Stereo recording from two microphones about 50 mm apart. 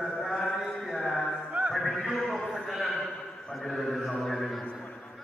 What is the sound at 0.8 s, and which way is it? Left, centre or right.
Music, centre.